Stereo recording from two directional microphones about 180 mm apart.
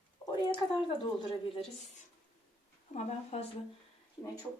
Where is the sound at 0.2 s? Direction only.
10° left (ahead or behind).